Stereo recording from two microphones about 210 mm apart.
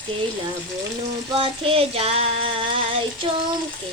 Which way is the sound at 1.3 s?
25° right (ahead or behind).